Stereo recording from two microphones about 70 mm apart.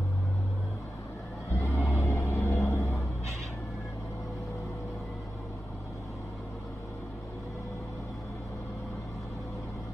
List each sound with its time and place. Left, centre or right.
1.8 s music: left